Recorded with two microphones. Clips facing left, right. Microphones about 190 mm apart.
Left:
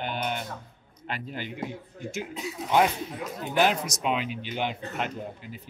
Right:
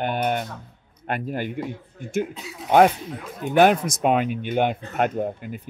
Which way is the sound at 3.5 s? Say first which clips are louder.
Right 8 dB; 55° right (ahead or behind).